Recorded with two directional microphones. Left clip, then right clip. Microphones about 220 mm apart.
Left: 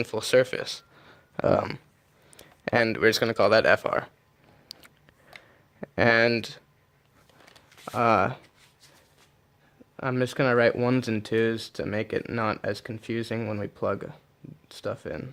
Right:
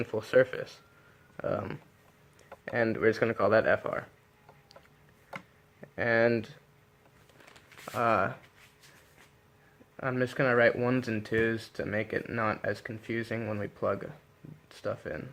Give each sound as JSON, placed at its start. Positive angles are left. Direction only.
{"t": 0.0, "sound": "speech", "side_deg": 50}
{"t": 5.8, "sound": "speech", "side_deg": 55}
{"t": 7.9, "sound": "speech", "side_deg": 45}
{"t": 10.0, "sound": "speech", "side_deg": 40}